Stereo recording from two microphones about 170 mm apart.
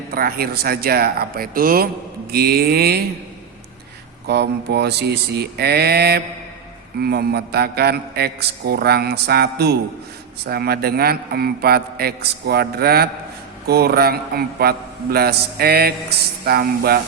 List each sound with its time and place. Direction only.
0.1 s a man's voice: 60° right (ahead or behind)
4.3 s a man's voice: 75° right (ahead or behind)